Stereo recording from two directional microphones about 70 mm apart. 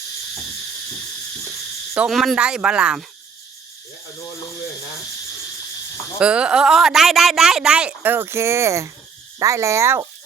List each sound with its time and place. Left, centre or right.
2.0 s speech: centre
2.4 s speech: centre
6.1 s speech: centre
8.0 s speech: right